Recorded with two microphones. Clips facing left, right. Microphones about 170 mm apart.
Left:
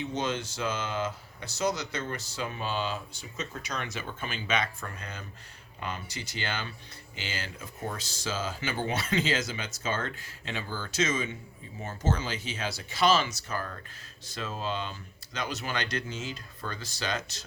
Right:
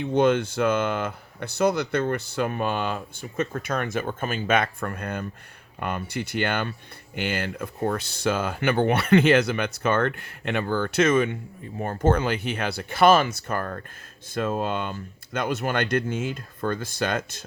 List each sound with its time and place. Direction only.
0.0 s speech: 55° right (ahead or behind)